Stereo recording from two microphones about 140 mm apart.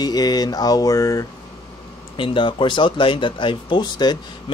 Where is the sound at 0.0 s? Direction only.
30° left (ahead or behind).